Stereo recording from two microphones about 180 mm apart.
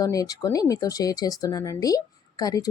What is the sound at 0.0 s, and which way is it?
Speech, 20° left (ahead or behind).